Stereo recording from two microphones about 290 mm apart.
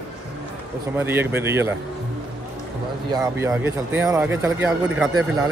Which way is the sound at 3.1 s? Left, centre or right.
Centre.